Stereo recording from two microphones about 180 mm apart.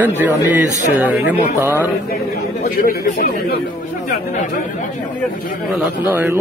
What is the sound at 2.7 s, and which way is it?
Speech, 55° left (ahead or behind).